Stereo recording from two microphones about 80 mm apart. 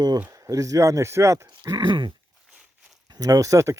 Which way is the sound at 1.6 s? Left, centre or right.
Right.